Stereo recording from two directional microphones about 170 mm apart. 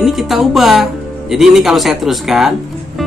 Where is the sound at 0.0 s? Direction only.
Centre (ahead or behind).